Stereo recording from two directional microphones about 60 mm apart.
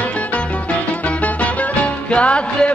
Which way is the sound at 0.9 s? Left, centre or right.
Left.